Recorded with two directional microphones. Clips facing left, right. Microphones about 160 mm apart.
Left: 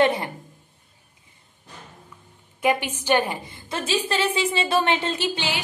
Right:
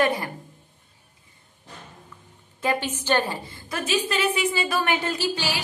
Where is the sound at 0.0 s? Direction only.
25° left (ahead or behind).